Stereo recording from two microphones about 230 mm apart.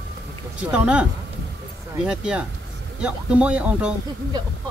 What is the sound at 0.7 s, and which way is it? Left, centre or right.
Speech, centre.